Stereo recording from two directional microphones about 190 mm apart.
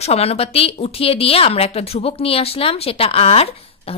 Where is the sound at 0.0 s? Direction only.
35° left (ahead or behind).